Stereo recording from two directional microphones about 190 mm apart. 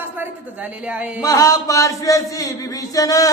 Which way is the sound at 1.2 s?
15° left (ahead or behind).